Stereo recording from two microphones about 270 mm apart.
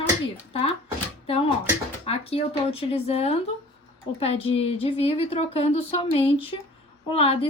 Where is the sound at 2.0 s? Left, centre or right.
Left.